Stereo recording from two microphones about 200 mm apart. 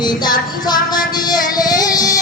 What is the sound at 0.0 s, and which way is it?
Music, 20° left (ahead or behind).